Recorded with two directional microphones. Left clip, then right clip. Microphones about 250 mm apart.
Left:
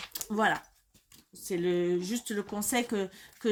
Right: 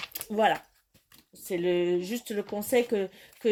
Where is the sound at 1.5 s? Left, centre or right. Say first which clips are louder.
Right 2 dB; centre.